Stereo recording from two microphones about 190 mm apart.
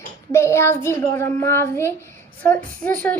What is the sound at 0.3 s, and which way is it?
Speech, 15° left (ahead or behind).